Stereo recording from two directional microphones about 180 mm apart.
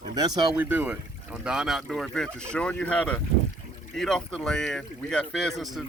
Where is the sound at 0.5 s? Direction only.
10° right (ahead or behind).